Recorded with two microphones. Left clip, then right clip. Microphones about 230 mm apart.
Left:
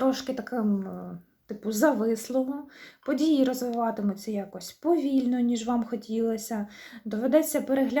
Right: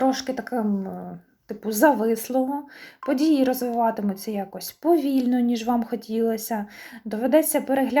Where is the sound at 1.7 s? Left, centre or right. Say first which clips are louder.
Right 5 dB; centre.